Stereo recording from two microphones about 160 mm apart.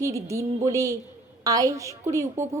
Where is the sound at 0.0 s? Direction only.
20° right (ahead or behind).